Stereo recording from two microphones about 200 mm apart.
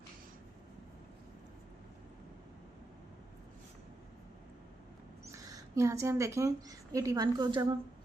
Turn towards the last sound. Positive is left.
turn(degrees=-20)  # may be behind; listen again after turning